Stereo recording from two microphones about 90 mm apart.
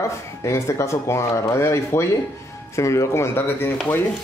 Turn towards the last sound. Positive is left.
turn(degrees=25)  # may be behind; listen again after turning